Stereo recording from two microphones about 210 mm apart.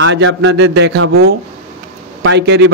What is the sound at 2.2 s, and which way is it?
Speech, 60° right (ahead or behind).